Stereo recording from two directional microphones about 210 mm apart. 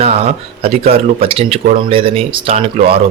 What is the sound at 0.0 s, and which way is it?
Speech, 30° right (ahead or behind).